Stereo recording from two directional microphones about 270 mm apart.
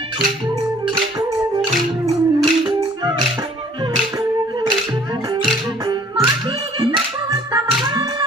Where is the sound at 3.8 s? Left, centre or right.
Centre.